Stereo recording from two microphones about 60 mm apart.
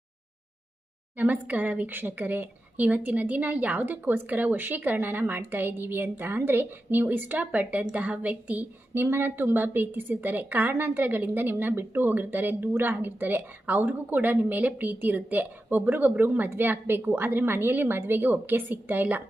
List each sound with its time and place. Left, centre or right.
1.1 s a woman's voice: right
9.0 s a woman's voice: right